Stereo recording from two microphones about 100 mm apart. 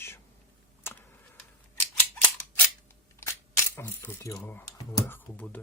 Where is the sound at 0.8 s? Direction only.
25° left (ahead or behind).